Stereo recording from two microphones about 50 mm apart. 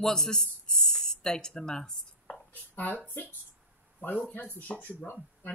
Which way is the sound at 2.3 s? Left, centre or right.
Left.